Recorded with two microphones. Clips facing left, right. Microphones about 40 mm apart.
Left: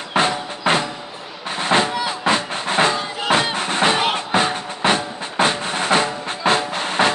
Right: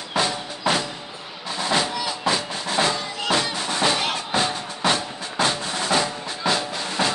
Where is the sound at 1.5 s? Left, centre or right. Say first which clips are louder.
Left 5 dB; left.